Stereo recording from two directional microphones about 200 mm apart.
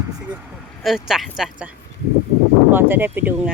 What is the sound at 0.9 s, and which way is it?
Speech, centre (ahead or behind).